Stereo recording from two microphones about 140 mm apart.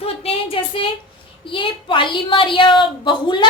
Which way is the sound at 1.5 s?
35° left (ahead or behind).